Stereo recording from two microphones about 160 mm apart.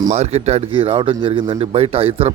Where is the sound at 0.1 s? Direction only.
40° right (ahead or behind).